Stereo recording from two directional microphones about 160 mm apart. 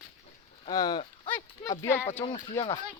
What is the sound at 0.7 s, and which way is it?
Speech, 25° left (ahead or behind).